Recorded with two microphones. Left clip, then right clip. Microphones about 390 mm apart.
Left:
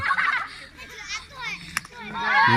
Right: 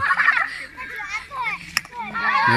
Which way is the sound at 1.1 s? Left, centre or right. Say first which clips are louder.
Right 5 dB; centre.